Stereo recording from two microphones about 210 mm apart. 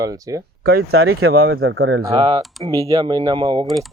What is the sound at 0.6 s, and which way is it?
Speech, 50° right (ahead or behind).